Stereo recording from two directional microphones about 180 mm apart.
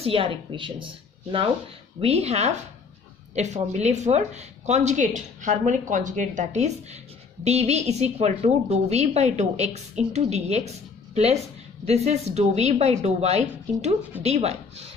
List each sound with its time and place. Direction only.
0.0 s speech: 30° right (ahead or behind)
11.8 s speech: 35° right (ahead or behind)